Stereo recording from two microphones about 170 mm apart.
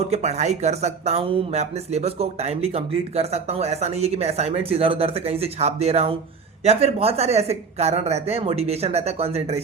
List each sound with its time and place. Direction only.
0.0 s speech: 40° right (ahead or behind)